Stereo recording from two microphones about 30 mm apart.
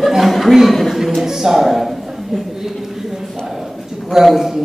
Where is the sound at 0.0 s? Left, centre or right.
Centre.